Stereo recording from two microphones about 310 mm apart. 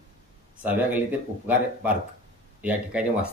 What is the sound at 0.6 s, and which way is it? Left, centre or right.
Speech, centre.